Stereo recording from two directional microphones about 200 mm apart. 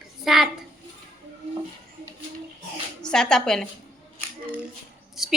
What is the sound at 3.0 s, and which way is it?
Speech, 5° left (ahead or behind).